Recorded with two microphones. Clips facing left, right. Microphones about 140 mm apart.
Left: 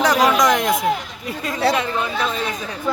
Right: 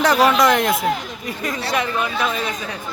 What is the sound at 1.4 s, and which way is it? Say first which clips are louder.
Speech: left 3 dB; 25° left (ahead or behind).